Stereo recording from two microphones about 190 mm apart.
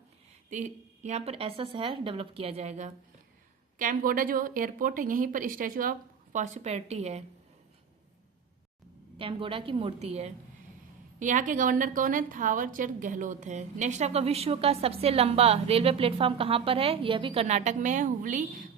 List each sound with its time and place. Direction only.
0.5 s a woman's voice: 40° right (ahead or behind)
9.1 s a woman's voice: 25° right (ahead or behind)